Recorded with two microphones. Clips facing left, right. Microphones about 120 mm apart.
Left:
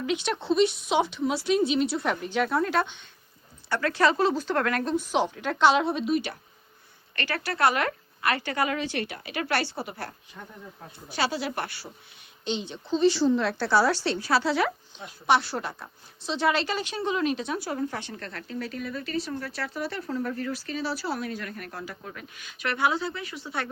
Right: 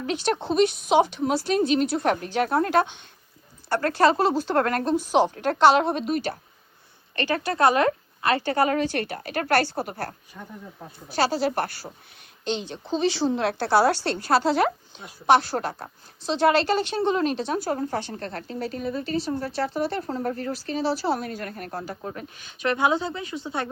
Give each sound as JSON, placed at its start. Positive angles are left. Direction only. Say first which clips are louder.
{"t": 0.0, "sound": "a woman's voice", "louder": "right 3 dB", "side_deg": -40}
{"t": 5.3, "sound": "a woman's voice", "louder": "right 2 dB", "side_deg": -45}
{"t": 7.2, "sound": "speech", "louder": "right 4 dB", "side_deg": -20}
{"t": 13.0, "sound": "a woman's voice", "louder": "left 2 dB", "side_deg": -65}
{"t": 21.2, "sound": "speech", "louder": "right 2 dB", "side_deg": -45}